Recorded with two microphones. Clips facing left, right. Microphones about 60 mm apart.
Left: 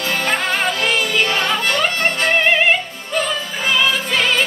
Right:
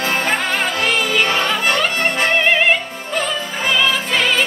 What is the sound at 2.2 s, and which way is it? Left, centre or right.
Music, centre.